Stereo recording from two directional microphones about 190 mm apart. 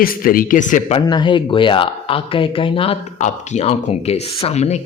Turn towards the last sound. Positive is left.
turn(degrees=35)  # may be behind; listen again after turning